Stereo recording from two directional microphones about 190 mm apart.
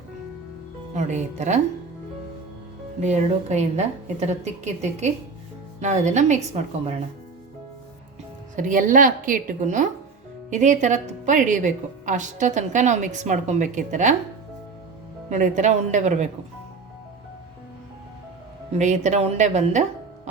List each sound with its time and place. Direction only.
0.9 s a woman's voice: 40° right (ahead or behind)
3.0 s a woman's voice: 35° right (ahead or behind)
8.5 s a woman's voice: 45° right (ahead or behind)
15.3 s a woman's voice: 40° right (ahead or behind)
18.8 s a woman's voice: 40° right (ahead or behind)